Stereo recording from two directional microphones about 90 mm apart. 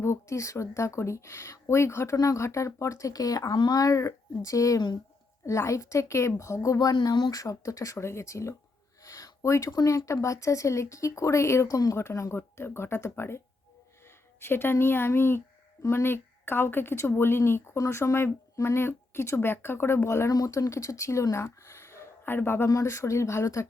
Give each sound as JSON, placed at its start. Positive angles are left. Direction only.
{"t": 0.0, "sound": "speech", "side_deg": 30}
{"t": 3.5, "sound": "speech", "side_deg": 60}
{"t": 3.8, "sound": "a woman's voice", "side_deg": 40}